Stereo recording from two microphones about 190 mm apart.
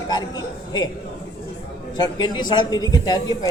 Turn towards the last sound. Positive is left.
turn(degrees=20)  # may be behind; listen again after turning